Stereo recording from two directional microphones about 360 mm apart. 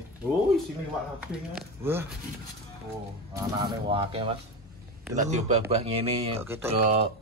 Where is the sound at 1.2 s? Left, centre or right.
Centre.